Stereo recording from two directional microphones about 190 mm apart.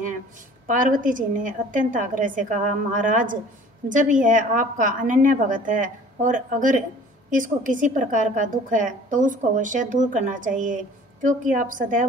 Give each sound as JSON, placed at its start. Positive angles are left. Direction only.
{"t": 0.7, "sound": "a woman's voice", "side_deg": -45}